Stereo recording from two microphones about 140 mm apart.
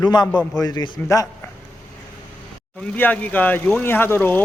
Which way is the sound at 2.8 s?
10° left (ahead or behind).